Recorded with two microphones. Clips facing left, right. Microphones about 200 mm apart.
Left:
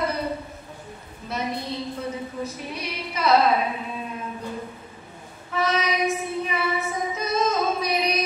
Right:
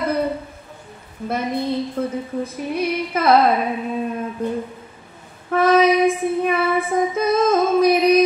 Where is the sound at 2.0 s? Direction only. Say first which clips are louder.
Right 7 dB; 55° right (ahead or behind).